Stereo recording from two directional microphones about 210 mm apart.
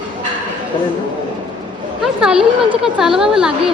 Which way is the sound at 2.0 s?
5° right (ahead or behind).